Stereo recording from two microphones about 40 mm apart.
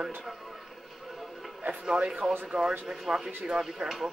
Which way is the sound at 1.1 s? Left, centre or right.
Centre.